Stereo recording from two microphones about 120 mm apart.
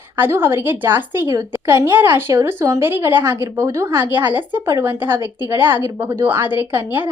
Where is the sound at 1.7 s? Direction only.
20° right (ahead or behind).